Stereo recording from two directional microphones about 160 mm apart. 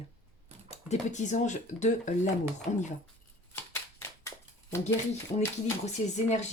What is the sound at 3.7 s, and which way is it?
Shuffling cards, 15° left (ahead or behind).